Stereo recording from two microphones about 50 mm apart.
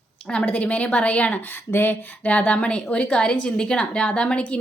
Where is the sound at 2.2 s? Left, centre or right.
Left.